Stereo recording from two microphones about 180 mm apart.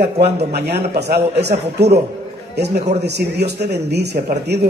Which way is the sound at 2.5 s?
70° right (ahead or behind).